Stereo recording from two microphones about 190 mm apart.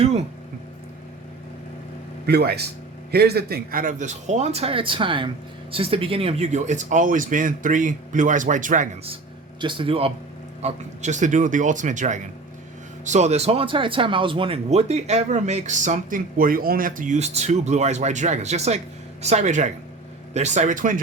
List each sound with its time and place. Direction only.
2.2 s a man's voice: 55° right (ahead or behind); by 9.1 s 40° right (ahead or behind)
9.6 s speech: 25° right (ahead or behind); by 21.0 s 45° right (ahead or behind)